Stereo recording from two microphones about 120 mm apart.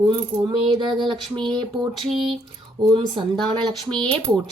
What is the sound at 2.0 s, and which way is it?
Speech, 50° right (ahead or behind).